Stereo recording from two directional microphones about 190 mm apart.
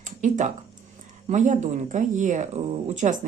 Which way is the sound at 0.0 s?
40° right (ahead or behind).